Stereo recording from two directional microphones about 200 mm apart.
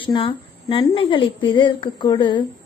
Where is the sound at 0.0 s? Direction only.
25° left (ahead or behind).